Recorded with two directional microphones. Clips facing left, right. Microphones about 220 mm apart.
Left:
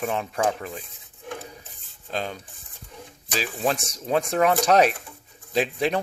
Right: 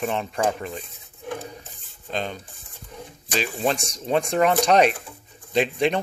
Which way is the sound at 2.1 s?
5° left (ahead or behind).